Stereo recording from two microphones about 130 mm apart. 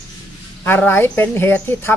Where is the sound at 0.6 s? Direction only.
15° left (ahead or behind).